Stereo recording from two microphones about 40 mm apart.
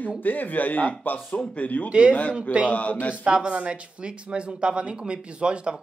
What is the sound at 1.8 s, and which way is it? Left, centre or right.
Speech, right.